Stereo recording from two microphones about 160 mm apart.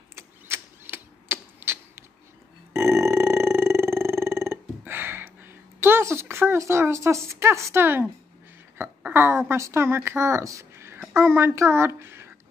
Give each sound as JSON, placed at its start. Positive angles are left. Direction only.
{"t": 0.1, "sound": "typewriter", "side_deg": -15}
{"t": 2.7, "sound": "burping", "side_deg": -15}
{"t": 8.7, "sound": "a sound", "side_deg": -15}
{"t": 9.5, "sound": "a woman's voice", "side_deg": -15}